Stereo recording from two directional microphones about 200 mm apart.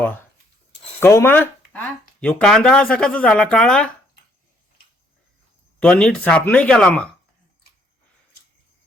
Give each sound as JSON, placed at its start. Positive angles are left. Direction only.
{"t": 0.9, "sound": "speech", "side_deg": 10}
{"t": 5.8, "sound": "speech", "side_deg": 5}